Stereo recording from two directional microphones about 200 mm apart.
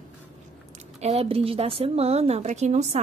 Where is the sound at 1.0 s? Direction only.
35° right (ahead or behind).